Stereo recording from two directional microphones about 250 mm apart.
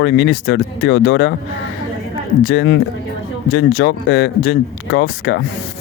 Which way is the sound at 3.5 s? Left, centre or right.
Left.